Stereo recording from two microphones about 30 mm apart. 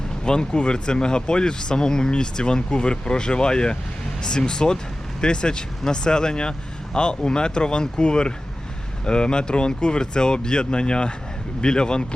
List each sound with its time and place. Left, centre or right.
0.3 s speech: left